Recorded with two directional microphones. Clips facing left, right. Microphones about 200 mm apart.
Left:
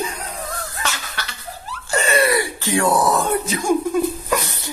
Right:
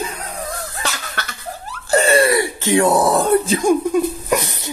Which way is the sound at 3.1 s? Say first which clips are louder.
Right 5 dB; 35° right (ahead or behind).